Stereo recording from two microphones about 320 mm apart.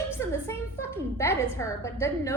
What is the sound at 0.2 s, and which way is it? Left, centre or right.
A woman's voice, centre.